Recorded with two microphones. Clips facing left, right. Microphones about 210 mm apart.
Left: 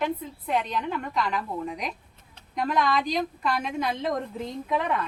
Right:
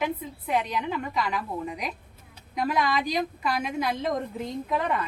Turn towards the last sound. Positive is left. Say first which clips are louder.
# even
turn(degrees=0)  # may be behind; listen again after turning